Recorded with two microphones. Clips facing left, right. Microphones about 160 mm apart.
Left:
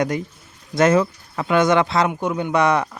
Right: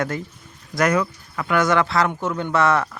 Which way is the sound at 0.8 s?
25° left (ahead or behind).